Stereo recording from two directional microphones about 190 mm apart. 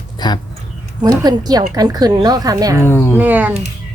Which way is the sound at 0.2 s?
25° left (ahead or behind).